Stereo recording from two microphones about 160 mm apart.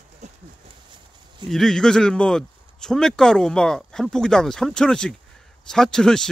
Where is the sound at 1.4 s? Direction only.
5° left (ahead or behind).